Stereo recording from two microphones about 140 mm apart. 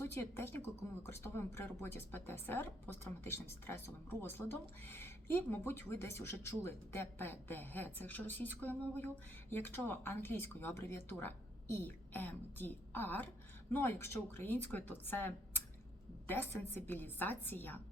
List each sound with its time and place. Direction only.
0.0 s speech: 15° left (ahead or behind)